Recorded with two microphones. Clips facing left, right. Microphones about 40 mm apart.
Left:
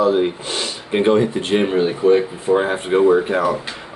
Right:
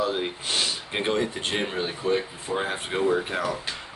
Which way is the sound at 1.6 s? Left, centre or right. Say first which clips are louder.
Left 11 dB; centre.